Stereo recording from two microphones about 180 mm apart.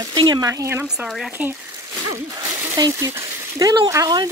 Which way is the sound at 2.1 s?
20° right (ahead or behind).